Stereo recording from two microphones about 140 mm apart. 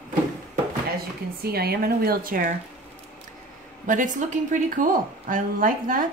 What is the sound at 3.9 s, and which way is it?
A woman's voice, 65° right (ahead or behind).